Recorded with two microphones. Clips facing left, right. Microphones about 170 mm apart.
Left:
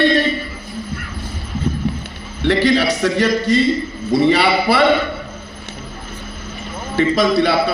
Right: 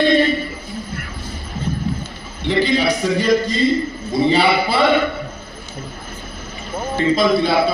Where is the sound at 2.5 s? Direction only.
75° left (ahead or behind).